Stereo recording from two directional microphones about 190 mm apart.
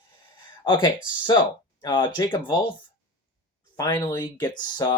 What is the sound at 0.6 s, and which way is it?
Speech, 25° left (ahead or behind).